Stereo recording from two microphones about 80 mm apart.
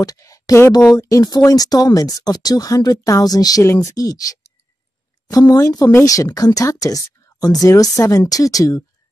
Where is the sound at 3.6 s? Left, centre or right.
Left.